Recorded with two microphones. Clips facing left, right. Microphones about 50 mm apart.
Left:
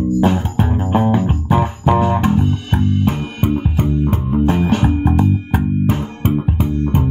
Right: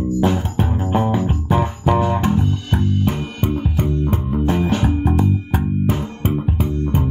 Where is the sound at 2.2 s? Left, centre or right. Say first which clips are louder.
Left 3 dB; centre.